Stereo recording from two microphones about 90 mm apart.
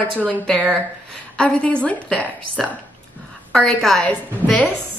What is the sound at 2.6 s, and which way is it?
A woman's voice, 5° left (ahead or behind).